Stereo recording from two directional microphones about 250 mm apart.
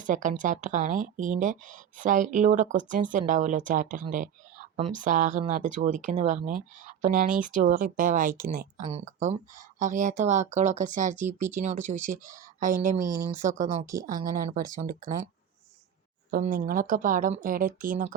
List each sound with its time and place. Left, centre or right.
0.0 s speech: right
16.3 s speech: right